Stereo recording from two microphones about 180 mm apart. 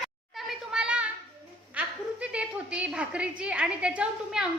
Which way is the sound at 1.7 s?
5° right (ahead or behind).